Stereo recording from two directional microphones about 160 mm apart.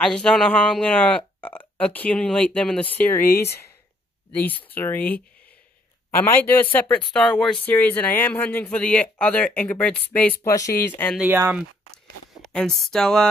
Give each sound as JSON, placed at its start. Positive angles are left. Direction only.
{"t": 0.0, "sound": "speech", "side_deg": 5}
{"t": 10.4, "sound": "speech", "side_deg": 20}
{"t": 11.1, "sound": "speech", "side_deg": -15}
{"t": 12.4, "sound": "speech", "side_deg": 0}